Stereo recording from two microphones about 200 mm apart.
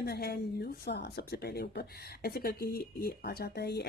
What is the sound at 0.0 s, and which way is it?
Speech, 50° left (ahead or behind).